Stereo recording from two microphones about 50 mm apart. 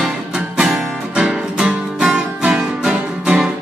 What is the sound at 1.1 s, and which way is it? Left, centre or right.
Music, centre.